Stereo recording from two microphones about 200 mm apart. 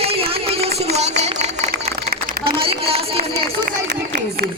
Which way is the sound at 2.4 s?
25° right (ahead or behind).